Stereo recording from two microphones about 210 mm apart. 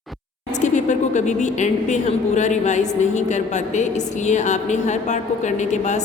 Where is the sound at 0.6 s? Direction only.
35° left (ahead or behind).